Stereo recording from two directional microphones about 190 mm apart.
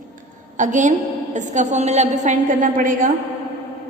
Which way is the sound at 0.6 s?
40° right (ahead or behind).